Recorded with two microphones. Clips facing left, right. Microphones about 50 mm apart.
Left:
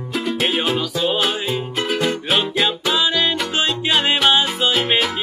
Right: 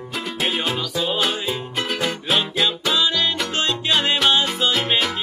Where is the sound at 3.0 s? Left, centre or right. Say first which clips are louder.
Left 3 dB; left.